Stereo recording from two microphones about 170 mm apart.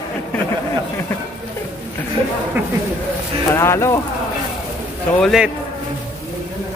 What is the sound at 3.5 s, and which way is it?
Speech, 15° left (ahead or behind).